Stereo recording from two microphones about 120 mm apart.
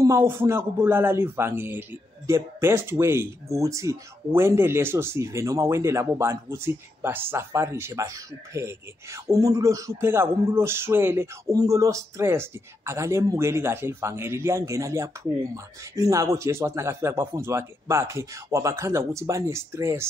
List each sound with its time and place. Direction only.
0.0 s a man's voice: 25° right (ahead or behind)